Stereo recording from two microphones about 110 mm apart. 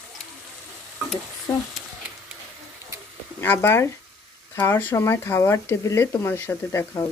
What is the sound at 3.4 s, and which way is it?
Speech, 25° left (ahead or behind).